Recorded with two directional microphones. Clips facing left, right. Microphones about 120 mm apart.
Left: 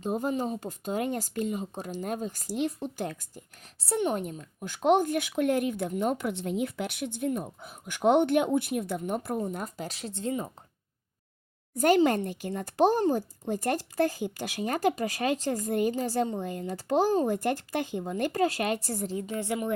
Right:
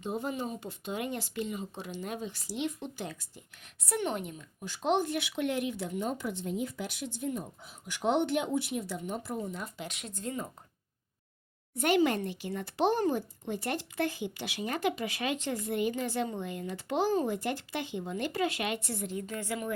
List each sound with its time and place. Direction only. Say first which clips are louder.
0.0 s speech: left 5 dB; 45° left (ahead or behind)
3.8 s speech: left 4 dB; 30° left (ahead or behind)
4.1 s speech: left 5 dB; 45° left (ahead or behind); by 10.5 s 25° left (ahead or behind)
12.0 s speech: left 4 dB; 45° left (ahead or behind)
19.3 s speech: left 7 dB; 25° left (ahead or behind)